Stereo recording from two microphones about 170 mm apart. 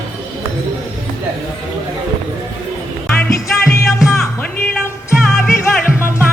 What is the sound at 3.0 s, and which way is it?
Music, 10° left (ahead or behind).